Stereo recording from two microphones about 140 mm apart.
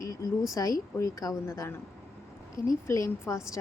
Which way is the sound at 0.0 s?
25° left (ahead or behind).